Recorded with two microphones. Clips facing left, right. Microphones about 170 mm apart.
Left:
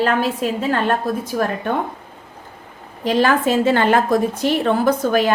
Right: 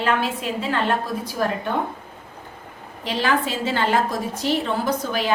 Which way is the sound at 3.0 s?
45° left (ahead or behind).